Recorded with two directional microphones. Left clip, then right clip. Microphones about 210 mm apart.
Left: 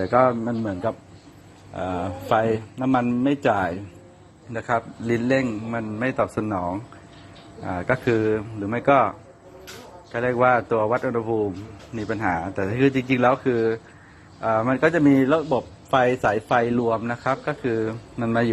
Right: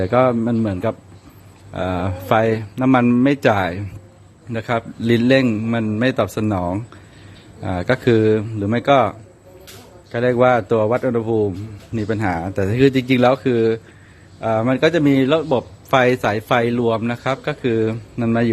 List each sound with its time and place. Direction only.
0.0 s a man's voice: 30° right (ahead or behind)